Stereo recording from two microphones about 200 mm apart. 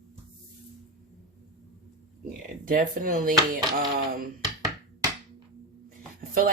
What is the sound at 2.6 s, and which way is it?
Speech, 45° right (ahead or behind).